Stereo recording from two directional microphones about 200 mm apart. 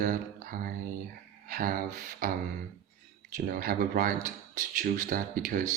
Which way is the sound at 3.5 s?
45° right (ahead or behind).